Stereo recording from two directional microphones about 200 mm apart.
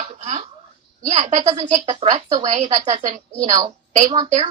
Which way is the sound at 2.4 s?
35° right (ahead or behind).